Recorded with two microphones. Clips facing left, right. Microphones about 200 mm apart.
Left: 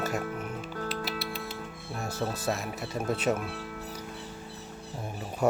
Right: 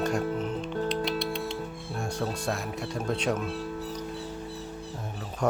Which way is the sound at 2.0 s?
5° left (ahead or behind).